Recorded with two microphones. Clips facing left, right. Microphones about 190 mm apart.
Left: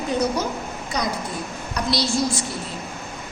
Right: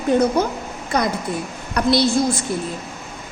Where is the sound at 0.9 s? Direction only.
55° right (ahead or behind).